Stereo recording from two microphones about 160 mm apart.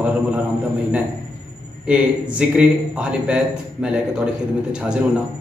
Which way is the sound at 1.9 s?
5° right (ahead or behind).